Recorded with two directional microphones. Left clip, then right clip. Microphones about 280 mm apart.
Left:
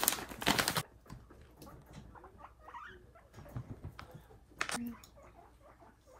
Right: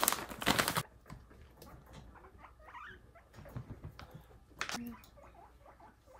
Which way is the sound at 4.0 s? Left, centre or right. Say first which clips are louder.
Left 2 dB; left.